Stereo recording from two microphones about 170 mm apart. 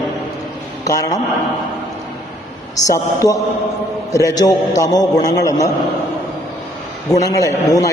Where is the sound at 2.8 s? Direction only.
20° left (ahead or behind).